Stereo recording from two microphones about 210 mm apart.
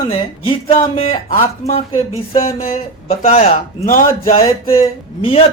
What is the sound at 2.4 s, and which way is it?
Speech, 45° left (ahead or behind).